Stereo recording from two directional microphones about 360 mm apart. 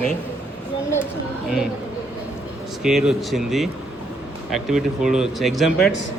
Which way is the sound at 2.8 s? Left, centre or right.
Centre.